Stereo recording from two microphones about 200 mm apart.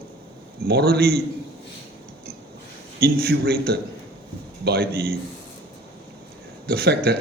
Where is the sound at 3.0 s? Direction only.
50° right (ahead or behind).